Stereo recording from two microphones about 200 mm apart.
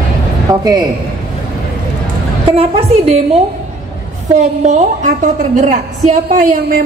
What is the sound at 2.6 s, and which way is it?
Speech, 30° right (ahead or behind).